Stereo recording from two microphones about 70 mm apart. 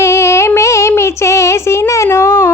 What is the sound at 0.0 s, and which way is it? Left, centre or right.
Female singing, left.